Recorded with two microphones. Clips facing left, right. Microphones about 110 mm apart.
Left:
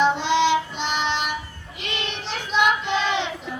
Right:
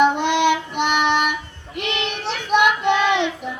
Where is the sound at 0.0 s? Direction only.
55° right (ahead or behind).